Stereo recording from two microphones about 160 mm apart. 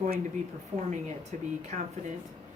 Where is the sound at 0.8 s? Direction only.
45° right (ahead or behind).